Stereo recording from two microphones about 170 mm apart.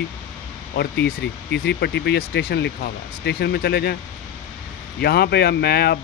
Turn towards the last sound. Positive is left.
turn(degrees=70)  # may be behind; listen again after turning